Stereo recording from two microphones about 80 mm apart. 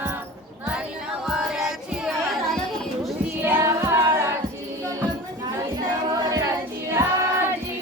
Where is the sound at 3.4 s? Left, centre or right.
Right.